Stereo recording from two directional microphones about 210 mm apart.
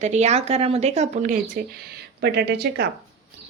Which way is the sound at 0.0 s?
30° right (ahead or behind).